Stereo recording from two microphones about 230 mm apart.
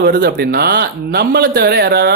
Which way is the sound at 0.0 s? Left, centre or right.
Right.